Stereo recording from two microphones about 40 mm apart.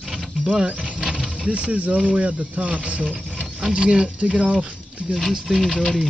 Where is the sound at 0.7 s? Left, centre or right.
Right.